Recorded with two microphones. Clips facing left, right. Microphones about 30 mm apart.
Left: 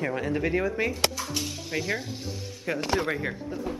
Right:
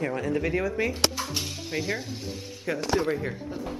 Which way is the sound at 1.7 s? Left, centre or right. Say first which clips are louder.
Even; centre.